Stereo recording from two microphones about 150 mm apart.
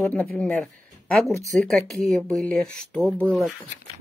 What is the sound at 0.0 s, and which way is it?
Speech, 10° left (ahead or behind).